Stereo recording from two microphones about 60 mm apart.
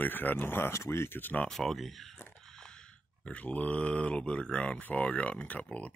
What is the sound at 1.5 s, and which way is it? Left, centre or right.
Speech, centre.